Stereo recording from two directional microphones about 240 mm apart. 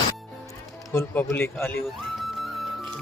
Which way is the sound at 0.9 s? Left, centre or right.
Centre.